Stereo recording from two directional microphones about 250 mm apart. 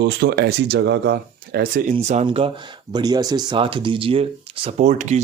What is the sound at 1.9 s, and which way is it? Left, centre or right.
Speech, right.